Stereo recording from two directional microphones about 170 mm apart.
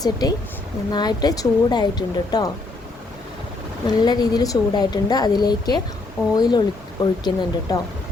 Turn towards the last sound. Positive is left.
turn(degrees=25)  # may be behind; listen again after turning